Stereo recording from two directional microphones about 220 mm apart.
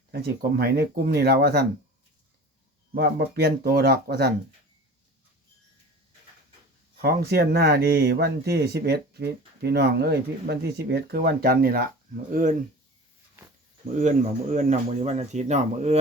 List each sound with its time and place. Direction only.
0.1 s speech: 45° right (ahead or behind)
2.9 s speech: 50° right (ahead or behind)
7.0 s speech: 45° right (ahead or behind)
14.5 s speech: 35° right (ahead or behind)